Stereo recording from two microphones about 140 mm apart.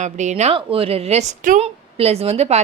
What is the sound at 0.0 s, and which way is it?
Speech, 60° right (ahead or behind).